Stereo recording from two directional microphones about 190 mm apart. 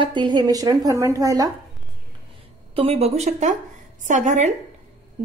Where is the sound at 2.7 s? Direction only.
30° right (ahead or behind).